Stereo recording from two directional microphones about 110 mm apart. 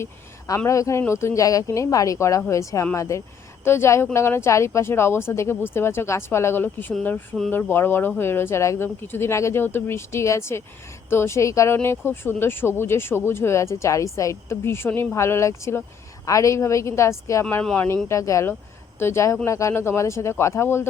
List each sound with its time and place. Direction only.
0.0 s speech: 30° left (ahead or behind)
17.6 s speech: 10° left (ahead or behind)
18.1 s speech: 30° left (ahead or behind)